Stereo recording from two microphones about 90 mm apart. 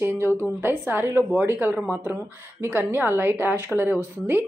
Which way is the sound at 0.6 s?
25° right (ahead or behind).